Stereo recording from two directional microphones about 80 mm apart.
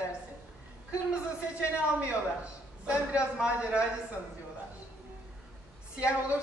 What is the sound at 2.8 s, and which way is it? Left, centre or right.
Speech, centre.